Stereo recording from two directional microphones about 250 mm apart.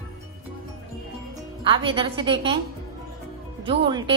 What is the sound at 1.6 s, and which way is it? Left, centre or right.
Speech, right.